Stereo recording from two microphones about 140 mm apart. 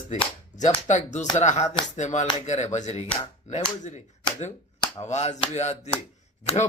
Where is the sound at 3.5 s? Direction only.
55° left (ahead or behind).